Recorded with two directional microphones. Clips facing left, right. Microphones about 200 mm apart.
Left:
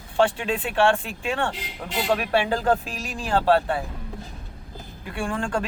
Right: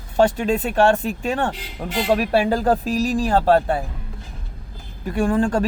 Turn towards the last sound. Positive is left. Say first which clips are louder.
# right 8 dB
turn(degrees=-40)  # may be behind; listen again after turning